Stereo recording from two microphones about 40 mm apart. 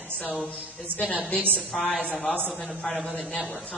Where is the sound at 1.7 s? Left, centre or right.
Centre.